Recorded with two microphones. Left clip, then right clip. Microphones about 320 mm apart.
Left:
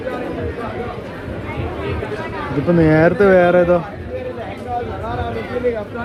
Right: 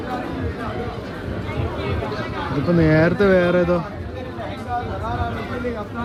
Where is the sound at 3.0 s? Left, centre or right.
Centre.